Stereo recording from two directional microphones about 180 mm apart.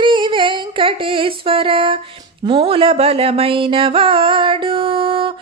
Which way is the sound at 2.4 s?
30° right (ahead or behind).